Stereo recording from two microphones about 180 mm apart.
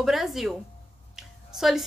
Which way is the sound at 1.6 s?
Centre (ahead or behind).